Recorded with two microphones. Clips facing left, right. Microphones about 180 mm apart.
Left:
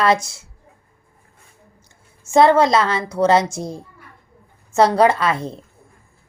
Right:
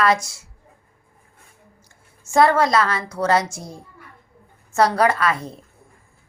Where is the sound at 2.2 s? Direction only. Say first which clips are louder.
Left 3 dB; 25° left (ahead or behind).